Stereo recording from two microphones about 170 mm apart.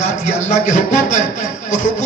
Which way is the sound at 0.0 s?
45° left (ahead or behind).